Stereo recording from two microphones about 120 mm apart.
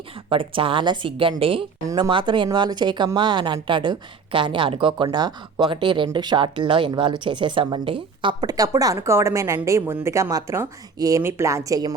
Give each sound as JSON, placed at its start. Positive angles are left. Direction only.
{"t": 0.3, "sound": "a woman's voice", "side_deg": -45}